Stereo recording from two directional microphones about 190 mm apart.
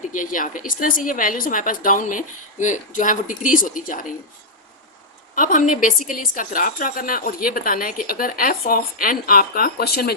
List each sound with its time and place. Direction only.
0.1 s speech: 45° left (ahead or behind)
5.3 s a woman's voice: 45° left (ahead or behind)